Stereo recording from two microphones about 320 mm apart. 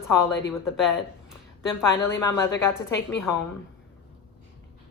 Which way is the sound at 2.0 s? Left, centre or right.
Centre.